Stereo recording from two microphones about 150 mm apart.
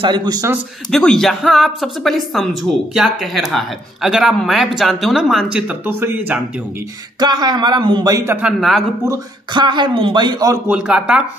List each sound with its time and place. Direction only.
0.0 s speech: 30° right (ahead or behind)
0.9 s a woman's voice: 5° left (ahead or behind); by 6.4 s 10° right (ahead or behind)
7.2 s speech: 30° right (ahead or behind)
8.5 s a woman's voice: centre (ahead or behind)
9.5 s speech: 30° right (ahead or behind)
10.7 s a woman's voice: 5° right (ahead or behind)